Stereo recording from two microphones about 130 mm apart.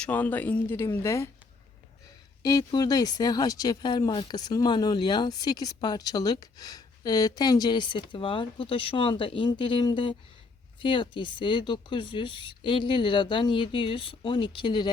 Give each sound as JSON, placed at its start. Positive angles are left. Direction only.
{"t": 0.0, "sound": "speech", "side_deg": 15}
{"t": 2.4, "sound": "speech", "side_deg": 30}